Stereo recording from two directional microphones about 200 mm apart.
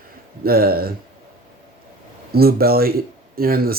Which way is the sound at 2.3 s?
50° right (ahead or behind).